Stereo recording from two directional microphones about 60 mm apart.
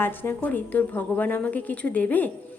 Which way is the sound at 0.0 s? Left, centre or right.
Left.